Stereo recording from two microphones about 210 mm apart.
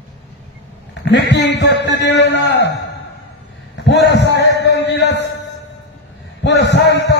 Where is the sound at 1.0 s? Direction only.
55° left (ahead or behind).